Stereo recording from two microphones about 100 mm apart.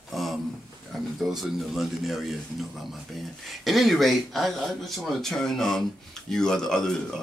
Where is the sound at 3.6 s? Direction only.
Centre (ahead or behind).